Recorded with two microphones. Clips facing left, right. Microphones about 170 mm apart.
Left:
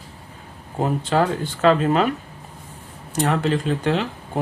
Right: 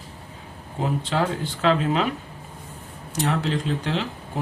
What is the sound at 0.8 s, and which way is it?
Speech, 45° left (ahead or behind).